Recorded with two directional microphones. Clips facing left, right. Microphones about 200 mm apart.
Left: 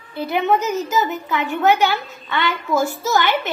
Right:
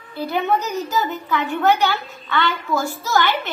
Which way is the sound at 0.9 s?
20° left (ahead or behind).